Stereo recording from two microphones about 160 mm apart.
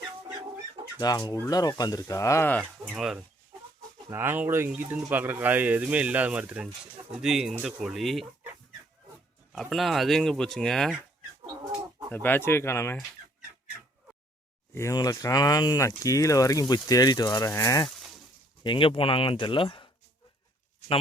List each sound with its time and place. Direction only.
0.9 s speech: 25° left (ahead or behind)
2.8 s speech: 5° right (ahead or behind)
4.1 s speech: 15° right (ahead or behind)
9.5 s speech: centre (ahead or behind)
12.1 s speech: 10° left (ahead or behind)
14.8 s speech: 20° left (ahead or behind)
17.8 s a sound: centre (ahead or behind)
18.6 s speech: 30° left (ahead or behind)